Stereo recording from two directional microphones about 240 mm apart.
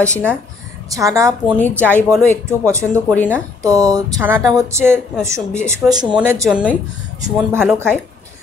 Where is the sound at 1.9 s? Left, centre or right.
Centre.